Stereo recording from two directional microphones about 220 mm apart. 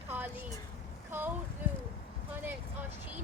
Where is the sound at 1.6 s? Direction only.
10° right (ahead or behind).